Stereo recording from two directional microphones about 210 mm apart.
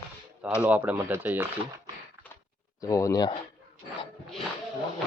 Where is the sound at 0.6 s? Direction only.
5° right (ahead or behind).